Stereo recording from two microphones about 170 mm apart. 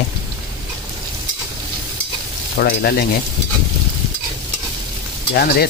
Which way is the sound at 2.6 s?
65° left (ahead or behind).